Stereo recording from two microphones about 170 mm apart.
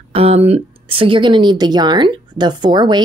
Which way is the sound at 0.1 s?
35° right (ahead or behind).